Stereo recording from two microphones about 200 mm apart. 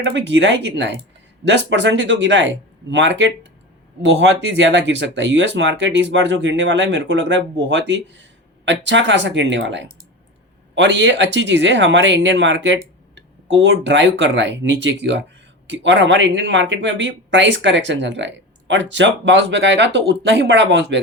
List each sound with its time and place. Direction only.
0.0 s speech: 70° right (ahead or behind)